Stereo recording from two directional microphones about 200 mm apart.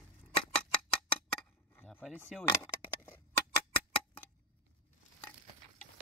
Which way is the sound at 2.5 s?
15° left (ahead or behind).